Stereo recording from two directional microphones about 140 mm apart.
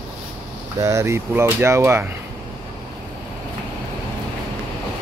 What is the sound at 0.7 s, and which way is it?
Speech, 25° right (ahead or behind).